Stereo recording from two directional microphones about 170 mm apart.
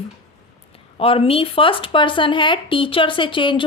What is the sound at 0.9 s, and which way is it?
Speech, 35° left (ahead or behind).